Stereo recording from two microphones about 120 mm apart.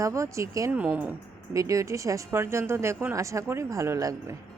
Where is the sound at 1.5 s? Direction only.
25° right (ahead or behind).